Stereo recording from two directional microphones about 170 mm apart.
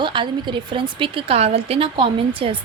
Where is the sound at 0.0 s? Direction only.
25° right (ahead or behind).